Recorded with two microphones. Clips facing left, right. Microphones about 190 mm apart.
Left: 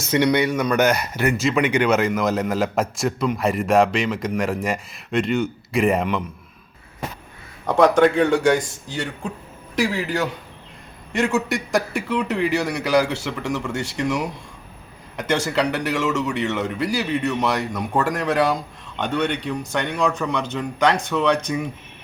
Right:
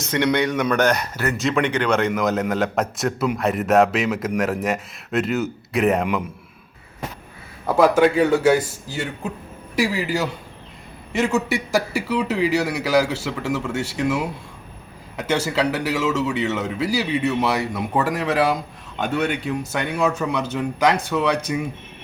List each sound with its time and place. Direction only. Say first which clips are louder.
0.1 s a man's voice: left 2 dB; 10° left (ahead or behind)
1.1 s speech: left 3 dB; 15° left (ahead or behind)
1.4 s a man's voice: even; centre (ahead or behind)
7.7 s a man's voice: even; 5° right (ahead or behind)